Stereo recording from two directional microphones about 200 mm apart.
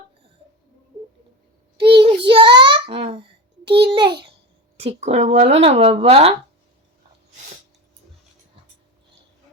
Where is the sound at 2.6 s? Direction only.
25° right (ahead or behind).